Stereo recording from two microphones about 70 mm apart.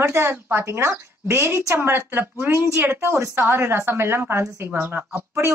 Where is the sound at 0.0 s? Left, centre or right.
Right.